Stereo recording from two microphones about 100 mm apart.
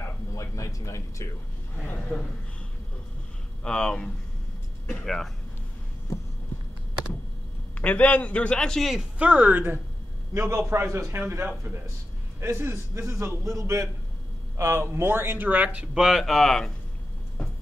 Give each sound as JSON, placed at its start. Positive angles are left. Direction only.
{"t": 0.0, "sound": "a sound", "side_deg": 30}
{"t": 1.8, "sound": "a man's voice", "side_deg": 15}
{"t": 3.6, "sound": "a man's voice", "side_deg": 10}
{"t": 7.8, "sound": "a man's voice", "side_deg": 15}
{"t": 9.2, "sound": "speech", "side_deg": -15}
{"t": 10.3, "sound": "a man's voice", "side_deg": -30}
{"t": 17.4, "sound": "a sound", "side_deg": 10}